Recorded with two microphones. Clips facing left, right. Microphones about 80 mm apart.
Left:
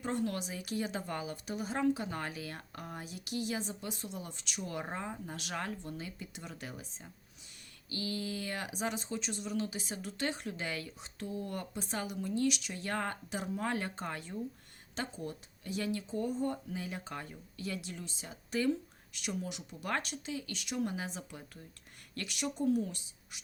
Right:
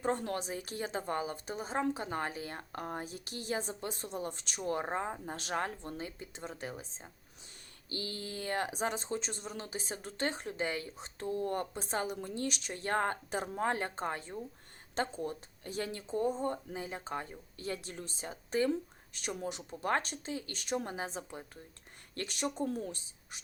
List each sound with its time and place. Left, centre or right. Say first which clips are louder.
0.0 s a woman's voice: right 1 dB; right